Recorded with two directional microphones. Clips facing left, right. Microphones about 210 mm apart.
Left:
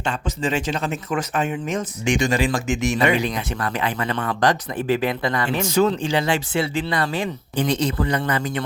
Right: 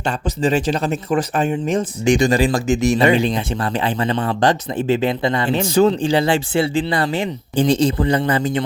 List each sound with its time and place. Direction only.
0.0 s a man's voice: 35° right (ahead or behind)